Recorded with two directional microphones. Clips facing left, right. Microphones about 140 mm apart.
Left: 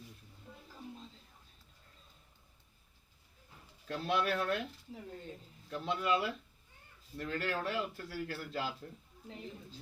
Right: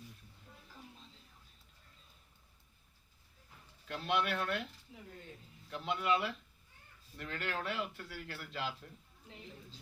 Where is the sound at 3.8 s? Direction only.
35° left (ahead or behind).